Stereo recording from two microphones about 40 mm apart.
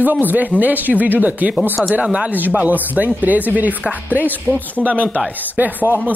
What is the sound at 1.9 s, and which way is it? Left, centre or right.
Speech, right.